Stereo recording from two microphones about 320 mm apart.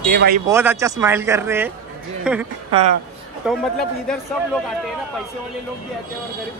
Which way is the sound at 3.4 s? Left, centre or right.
Centre.